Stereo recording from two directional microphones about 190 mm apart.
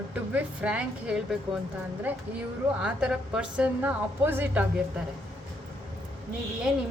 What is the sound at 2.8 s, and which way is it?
A woman's voice, 5° right (ahead or behind).